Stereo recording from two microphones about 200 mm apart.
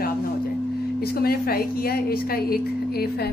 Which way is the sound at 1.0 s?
50° left (ahead or behind).